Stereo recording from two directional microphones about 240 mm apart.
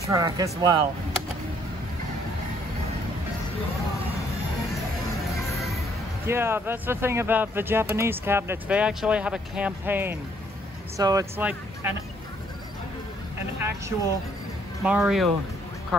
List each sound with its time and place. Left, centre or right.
0.0 s speech: centre
5.3 s music: centre
6.2 s speech: centre
13.6 s a woman's voice: centre